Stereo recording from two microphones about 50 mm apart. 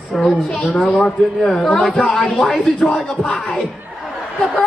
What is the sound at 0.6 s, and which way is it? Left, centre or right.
Speech, left.